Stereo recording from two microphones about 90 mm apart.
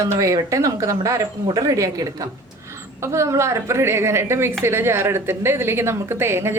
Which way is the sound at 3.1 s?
30° right (ahead or behind).